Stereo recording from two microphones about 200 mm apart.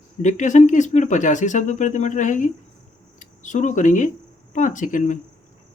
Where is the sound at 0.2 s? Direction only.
40° left (ahead or behind).